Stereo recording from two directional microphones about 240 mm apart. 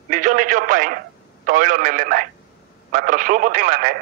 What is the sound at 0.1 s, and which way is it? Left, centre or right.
Speech, right.